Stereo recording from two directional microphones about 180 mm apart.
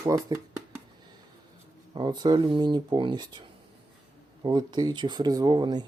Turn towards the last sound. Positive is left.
turn(degrees=-25)  # may be behind; listen again after turning